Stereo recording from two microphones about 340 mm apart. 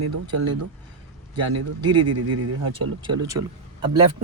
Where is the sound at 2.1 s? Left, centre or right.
Right.